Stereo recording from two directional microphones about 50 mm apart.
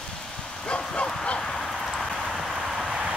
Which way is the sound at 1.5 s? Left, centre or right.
Centre.